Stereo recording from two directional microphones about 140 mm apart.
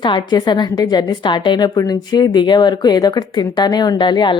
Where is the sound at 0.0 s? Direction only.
35° left (ahead or behind).